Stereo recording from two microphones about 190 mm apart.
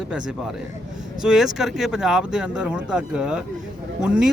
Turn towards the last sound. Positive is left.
turn(degrees=-5)  # may be behind; listen again after turning